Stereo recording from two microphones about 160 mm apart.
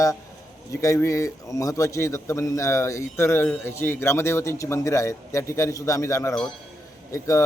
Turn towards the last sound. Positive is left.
turn(degrees=20)  # may be behind; listen again after turning